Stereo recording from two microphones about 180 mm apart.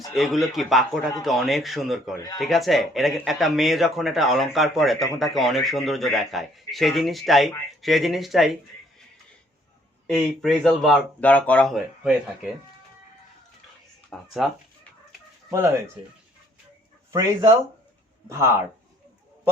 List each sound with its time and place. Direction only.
0.2 s speech: centre (ahead or behind)
10.1 s speech: centre (ahead or behind)
14.1 s speech: centre (ahead or behind)
15.4 s speech: 15° right (ahead or behind)
17.1 s speech: 15° right (ahead or behind)